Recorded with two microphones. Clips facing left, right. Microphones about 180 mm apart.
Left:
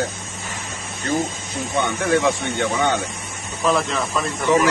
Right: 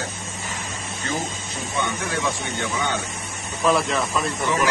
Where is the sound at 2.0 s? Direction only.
65° left (ahead or behind).